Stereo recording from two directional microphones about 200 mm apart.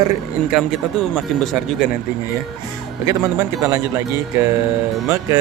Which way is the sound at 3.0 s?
15° right (ahead or behind).